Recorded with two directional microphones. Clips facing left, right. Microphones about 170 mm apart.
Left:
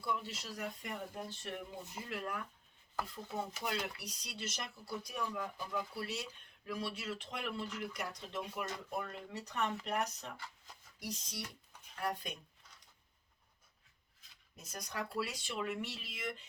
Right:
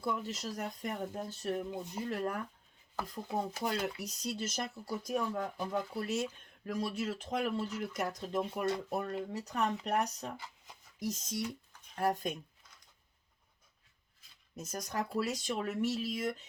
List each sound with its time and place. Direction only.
0.0 s speech: 45° right (ahead or behind)
14.5 s speech: 45° right (ahead or behind)